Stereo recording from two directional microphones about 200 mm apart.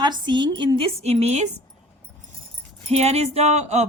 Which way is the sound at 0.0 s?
20° right (ahead or behind).